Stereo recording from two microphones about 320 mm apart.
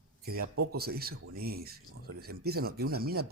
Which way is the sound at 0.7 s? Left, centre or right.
Right.